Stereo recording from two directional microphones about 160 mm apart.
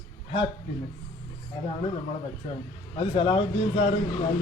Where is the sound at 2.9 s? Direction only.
30° left (ahead or behind).